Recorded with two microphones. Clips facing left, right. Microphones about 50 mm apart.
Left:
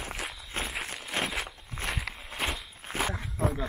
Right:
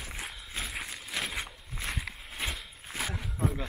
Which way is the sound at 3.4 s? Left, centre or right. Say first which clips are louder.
Left 2 dB; left.